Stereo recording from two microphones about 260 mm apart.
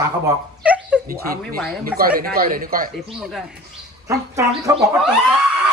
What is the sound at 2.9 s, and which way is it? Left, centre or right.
A woman's voice, centre.